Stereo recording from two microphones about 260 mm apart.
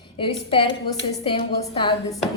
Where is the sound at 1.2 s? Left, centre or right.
Centre.